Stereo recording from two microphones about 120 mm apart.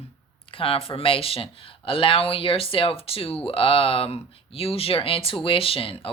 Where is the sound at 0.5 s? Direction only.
50° left (ahead or behind).